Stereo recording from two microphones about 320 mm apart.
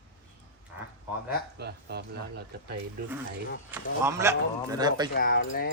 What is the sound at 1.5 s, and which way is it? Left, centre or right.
Speech, right.